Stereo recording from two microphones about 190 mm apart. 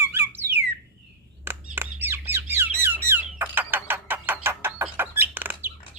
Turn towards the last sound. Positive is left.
turn(degrees=-10)  # may be behind; listen again after turning